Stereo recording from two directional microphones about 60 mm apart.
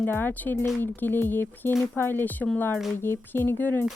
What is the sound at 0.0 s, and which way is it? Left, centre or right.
Speech, left.